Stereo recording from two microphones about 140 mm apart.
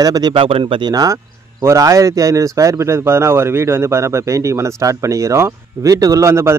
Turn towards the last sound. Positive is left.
turn(degrees=-20)  # may be behind; listen again after turning